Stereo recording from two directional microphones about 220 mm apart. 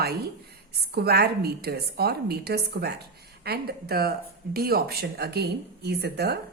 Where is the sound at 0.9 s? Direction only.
45° right (ahead or behind).